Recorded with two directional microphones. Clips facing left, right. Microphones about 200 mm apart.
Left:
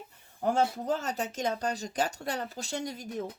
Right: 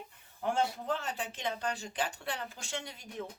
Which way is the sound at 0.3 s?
40° left (ahead or behind).